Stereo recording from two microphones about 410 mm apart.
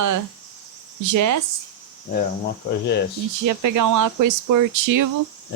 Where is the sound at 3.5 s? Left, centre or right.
Right.